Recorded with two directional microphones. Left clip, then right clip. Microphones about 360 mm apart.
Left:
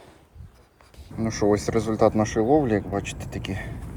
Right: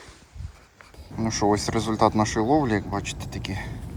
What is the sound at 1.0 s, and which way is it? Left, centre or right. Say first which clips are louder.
Speech: even; centre.